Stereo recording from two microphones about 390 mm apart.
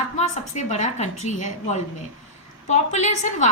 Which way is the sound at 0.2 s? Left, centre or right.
Centre.